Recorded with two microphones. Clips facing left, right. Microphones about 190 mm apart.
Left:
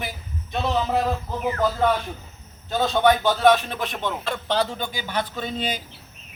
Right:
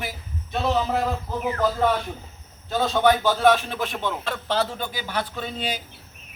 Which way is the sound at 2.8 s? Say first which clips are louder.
Left 1 dB; centre (ahead or behind).